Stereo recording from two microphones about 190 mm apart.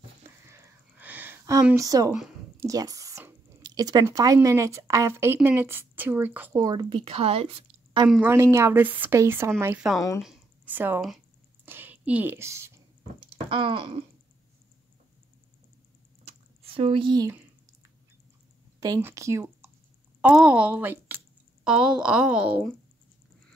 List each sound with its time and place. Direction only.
0.5 s a sound: 15° right (ahead or behind)
1.8 s speech: 20° right (ahead or behind)
8.1 s speech: 10° right (ahead or behind)
9.9 s speech: 15° left (ahead or behind)
10.2 s a sound: 5° right (ahead or behind)
13.5 s wail: 25° right (ahead or behind)
16.3 s squish: 30° right (ahead or behind)
18.8 s a woman's voice: 15° right (ahead or behind)